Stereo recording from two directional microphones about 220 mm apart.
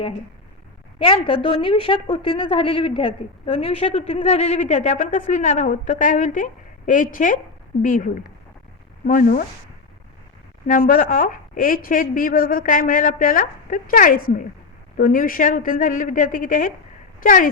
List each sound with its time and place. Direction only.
0.9 s a woman's voice: 25° left (ahead or behind); by 9.5 s 40° left (ahead or behind)
10.7 s a woman's voice: 40° left (ahead or behind)